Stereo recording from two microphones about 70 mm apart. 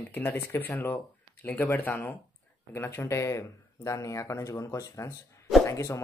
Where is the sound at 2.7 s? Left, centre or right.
Left.